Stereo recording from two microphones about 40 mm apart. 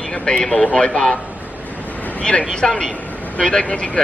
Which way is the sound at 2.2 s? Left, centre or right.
Left.